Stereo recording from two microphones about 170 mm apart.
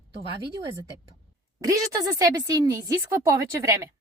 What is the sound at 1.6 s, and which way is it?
Speech, 20° right (ahead or behind).